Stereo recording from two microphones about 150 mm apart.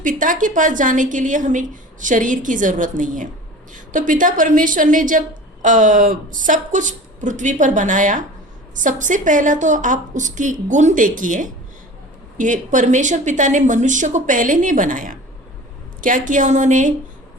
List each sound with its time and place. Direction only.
0.0 s a woman's voice: 60° right (ahead or behind)